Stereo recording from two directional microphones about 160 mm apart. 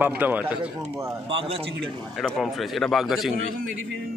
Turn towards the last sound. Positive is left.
turn(degrees=0)  # may be behind; listen again after turning